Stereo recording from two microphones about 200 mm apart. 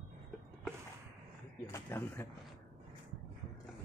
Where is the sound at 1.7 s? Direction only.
15° left (ahead or behind).